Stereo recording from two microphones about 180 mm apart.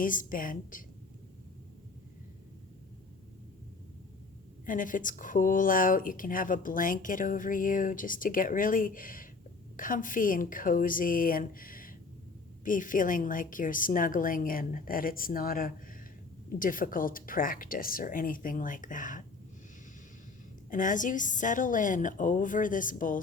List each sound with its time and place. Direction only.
0.0 s speech: 50° left (ahead or behind)
4.6 s speech: 45° left (ahead or behind)
20.7 s speech: 45° left (ahead or behind)